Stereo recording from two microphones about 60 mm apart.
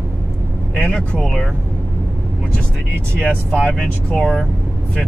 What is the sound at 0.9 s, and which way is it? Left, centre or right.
Speech, centre.